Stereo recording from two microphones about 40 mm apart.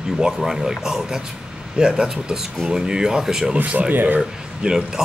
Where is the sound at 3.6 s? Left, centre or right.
Right.